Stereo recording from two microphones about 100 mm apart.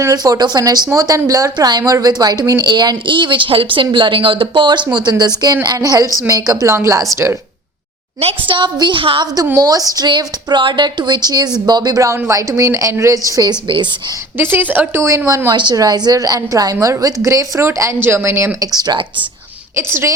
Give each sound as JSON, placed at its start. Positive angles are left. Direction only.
{"t": 0.0, "sound": "a woman's voice", "side_deg": -35}
{"t": 8.2, "sound": "a woman's voice", "side_deg": -65}
{"t": 9.2, "sound": "a woman's voice", "side_deg": -40}
{"t": 10.1, "sound": "a woman's voice", "side_deg": -50}
{"t": 14.3, "sound": "a woman's voice", "side_deg": -20}
{"t": 15.3, "sound": "a woman's voice", "side_deg": -30}
{"t": 15.5, "sound": "a woman's voice", "side_deg": -45}
{"t": 18.7, "sound": "speech", "side_deg": -45}
{"t": 19.7, "sound": "a woman's voice", "side_deg": -25}